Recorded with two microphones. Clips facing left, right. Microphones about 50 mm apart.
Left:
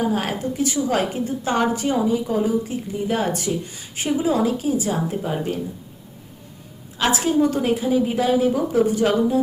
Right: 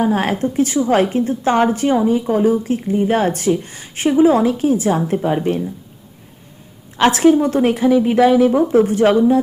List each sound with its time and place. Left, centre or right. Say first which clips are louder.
0.0 s a woman's voice: right 6 dB; right
6.9 s speech: right 9 dB; right
7.3 s speech: right 4 dB; right